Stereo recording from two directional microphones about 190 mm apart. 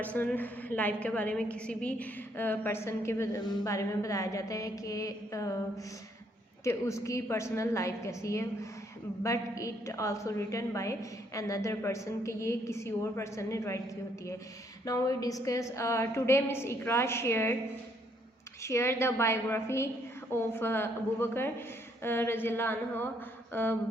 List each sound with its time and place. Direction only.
0.0 s a woman's voice: 10° left (ahead or behind)
14.8 s a woman's voice: 20° left (ahead or behind)
18.6 s a woman's voice: 15° left (ahead or behind)